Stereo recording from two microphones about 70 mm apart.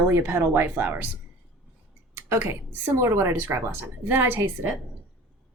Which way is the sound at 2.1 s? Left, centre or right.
Right.